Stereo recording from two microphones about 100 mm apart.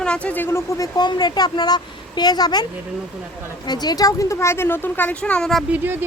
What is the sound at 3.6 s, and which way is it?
A woman's voice, 45° left (ahead or behind).